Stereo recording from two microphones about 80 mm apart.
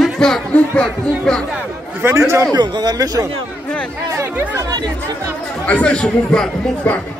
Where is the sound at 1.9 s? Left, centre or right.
Right.